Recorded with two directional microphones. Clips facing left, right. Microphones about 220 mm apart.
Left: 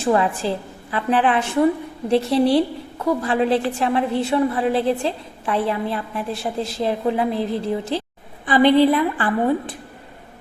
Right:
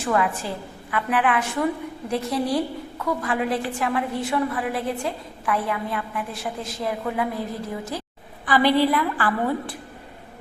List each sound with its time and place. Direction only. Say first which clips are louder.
0.0 s a woman's voice: left 4 dB; 30° left (ahead or behind)